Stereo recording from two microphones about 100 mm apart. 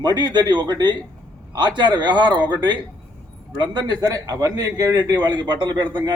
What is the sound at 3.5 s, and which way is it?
A man's voice, 45° right (ahead or behind).